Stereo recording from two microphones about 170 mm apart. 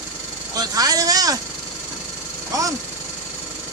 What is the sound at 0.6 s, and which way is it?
Speech, 20° right (ahead or behind).